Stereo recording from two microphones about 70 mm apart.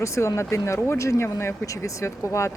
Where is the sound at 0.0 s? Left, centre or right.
Left.